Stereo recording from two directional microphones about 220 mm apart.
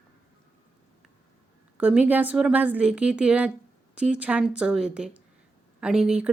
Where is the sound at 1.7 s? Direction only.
5° right (ahead or behind).